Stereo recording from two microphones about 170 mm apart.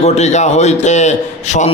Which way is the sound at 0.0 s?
40° left (ahead or behind).